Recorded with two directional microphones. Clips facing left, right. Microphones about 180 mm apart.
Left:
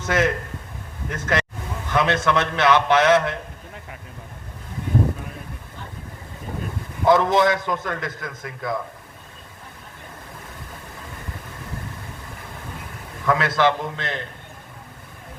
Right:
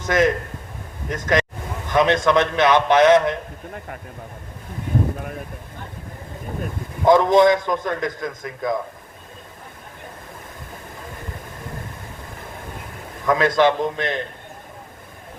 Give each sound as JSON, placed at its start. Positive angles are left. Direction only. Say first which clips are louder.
{"t": 0.0, "sound": "a man's voice", "louder": "right 3 dB", "side_deg": -15}
{"t": 7.0, "sound": "a man's voice", "louder": "right 3 dB", "side_deg": -20}
{"t": 13.2, "sound": "a man's voice", "louder": "right 3 dB", "side_deg": -20}